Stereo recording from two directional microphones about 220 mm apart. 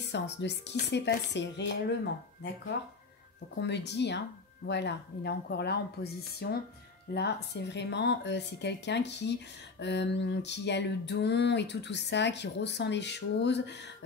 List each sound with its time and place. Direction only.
0.0 s speech: 50° left (ahead or behind)